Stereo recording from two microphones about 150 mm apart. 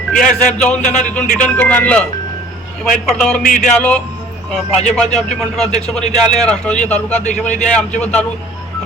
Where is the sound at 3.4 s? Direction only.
60° left (ahead or behind).